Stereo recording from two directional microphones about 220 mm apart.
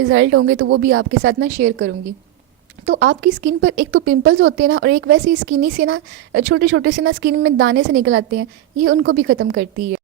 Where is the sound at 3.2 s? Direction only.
40° right (ahead or behind).